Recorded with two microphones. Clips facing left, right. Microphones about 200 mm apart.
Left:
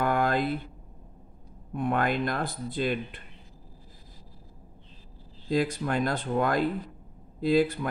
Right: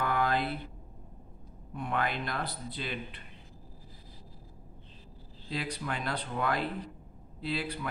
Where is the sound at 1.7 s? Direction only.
50° left (ahead or behind).